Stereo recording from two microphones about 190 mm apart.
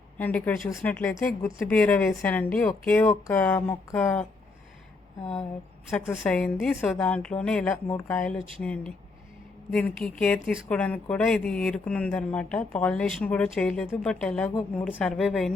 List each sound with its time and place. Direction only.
0.2 s speech: 10° left (ahead or behind)
6.1 s speech: 5° left (ahead or behind)
9.7 s speech: 5° left (ahead or behind)